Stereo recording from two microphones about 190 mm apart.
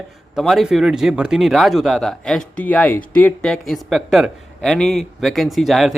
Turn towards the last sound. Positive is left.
turn(degrees=0)  # may be behind; listen again after turning